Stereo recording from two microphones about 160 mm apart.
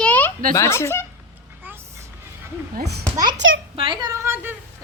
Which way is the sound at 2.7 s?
90° right.